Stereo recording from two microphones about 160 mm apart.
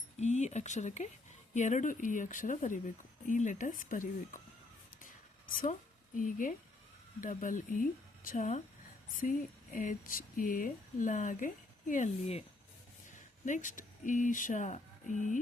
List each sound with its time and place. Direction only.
0.2 s speech: 45° left (ahead or behind)
6.1 s speech: 55° left (ahead or behind)
9.7 s speech: 60° left (ahead or behind)
12.2 s speech: 40° left (ahead or behind)
13.4 s speech: 50° left (ahead or behind)